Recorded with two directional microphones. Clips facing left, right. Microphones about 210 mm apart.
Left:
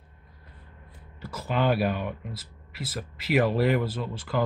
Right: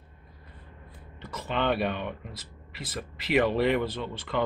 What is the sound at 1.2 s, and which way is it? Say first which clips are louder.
Speech: left 2 dB; 5° left (ahead or behind).